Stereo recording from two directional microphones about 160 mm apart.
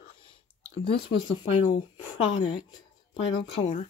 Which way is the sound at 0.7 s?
35° left (ahead or behind).